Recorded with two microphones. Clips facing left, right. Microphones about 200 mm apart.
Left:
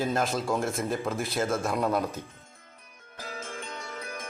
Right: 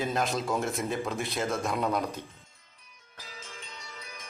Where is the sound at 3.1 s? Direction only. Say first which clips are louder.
Left 9 dB; 50° left (ahead or behind).